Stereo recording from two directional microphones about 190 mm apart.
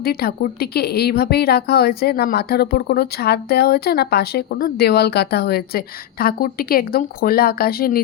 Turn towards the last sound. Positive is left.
turn(degrees=50)  # may be behind; listen again after turning